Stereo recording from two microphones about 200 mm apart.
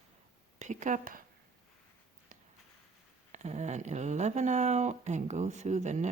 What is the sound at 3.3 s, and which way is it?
Speech, 35° right (ahead or behind).